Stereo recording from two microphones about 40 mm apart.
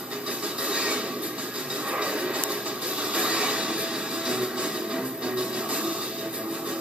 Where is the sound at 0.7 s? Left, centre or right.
Right.